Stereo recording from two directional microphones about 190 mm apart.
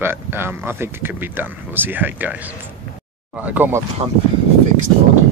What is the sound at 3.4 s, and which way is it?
Speech, 10° right (ahead or behind).